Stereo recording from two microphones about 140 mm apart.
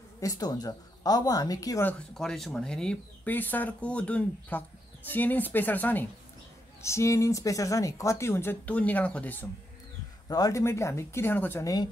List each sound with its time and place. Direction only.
0.2 s speech: 25° left (ahead or behind)
1.9 s speech: 5° left (ahead or behind)
10.2 s speech: 25° left (ahead or behind)